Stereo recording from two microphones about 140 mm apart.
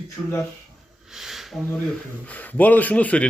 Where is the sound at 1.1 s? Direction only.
Centre (ahead or behind).